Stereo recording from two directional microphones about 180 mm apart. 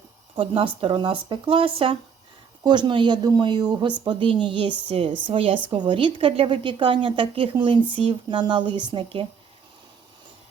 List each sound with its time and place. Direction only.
0.3 s a woman's voice: 30° right (ahead or behind)